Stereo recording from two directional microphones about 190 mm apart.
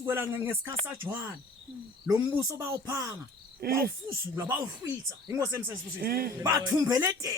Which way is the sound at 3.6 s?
50° right (ahead or behind).